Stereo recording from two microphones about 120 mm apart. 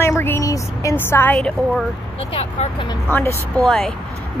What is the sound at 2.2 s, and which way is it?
Speech, 55° left (ahead or behind).